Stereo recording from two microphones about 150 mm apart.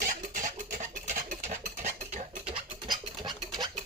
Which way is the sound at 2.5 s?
35° right (ahead or behind).